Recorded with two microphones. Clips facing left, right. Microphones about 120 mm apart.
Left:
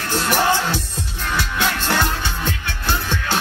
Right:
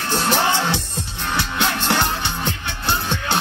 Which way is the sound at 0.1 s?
25° right (ahead or behind).